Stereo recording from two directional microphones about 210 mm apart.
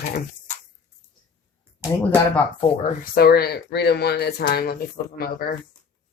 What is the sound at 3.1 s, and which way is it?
Speech, 50° left (ahead or behind).